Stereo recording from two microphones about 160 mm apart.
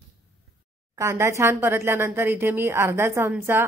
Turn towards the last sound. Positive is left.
turn(degrees=-15)  # may be behind; listen again after turning